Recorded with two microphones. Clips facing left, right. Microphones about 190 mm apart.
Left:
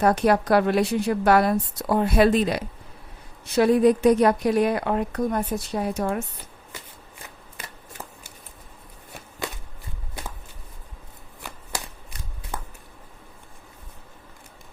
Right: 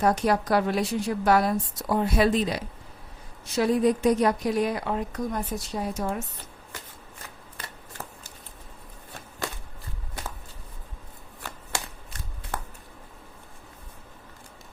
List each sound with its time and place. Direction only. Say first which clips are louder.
0.0 s a woman's voice: left 3 dB; 60° left (ahead or behind)